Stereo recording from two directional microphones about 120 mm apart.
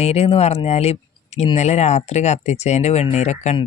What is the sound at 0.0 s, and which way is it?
Speech, 60° left (ahead or behind).